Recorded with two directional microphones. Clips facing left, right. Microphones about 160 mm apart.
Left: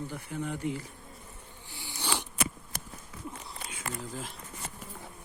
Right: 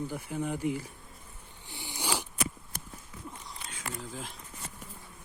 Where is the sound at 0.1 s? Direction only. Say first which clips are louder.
Right 2 dB; 10° right (ahead or behind).